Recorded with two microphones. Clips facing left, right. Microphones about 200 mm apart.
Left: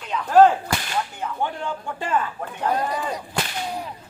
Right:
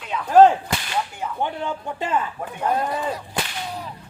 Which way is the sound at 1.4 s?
20° right (ahead or behind).